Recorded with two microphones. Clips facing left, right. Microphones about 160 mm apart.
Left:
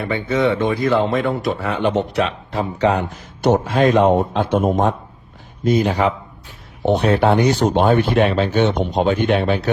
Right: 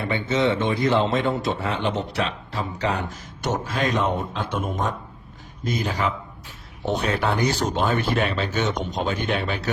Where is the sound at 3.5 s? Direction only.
45° left (ahead or behind).